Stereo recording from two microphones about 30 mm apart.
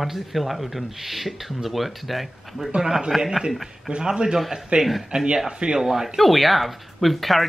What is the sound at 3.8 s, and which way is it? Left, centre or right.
Speech, right.